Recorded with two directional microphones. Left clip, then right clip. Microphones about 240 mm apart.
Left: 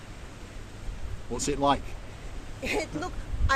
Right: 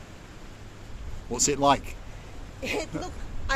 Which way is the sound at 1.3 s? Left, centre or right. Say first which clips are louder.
Right 3 dB; right.